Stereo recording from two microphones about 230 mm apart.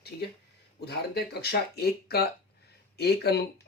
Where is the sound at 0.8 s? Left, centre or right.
Left.